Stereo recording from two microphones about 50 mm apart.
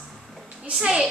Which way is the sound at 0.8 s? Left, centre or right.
Centre.